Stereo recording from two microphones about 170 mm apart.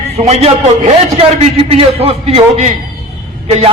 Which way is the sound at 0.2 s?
40° right (ahead or behind).